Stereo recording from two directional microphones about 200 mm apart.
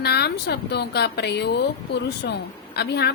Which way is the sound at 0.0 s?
55° left (ahead or behind).